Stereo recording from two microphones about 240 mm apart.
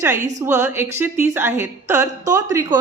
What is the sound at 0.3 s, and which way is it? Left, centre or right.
A woman's voice, centre.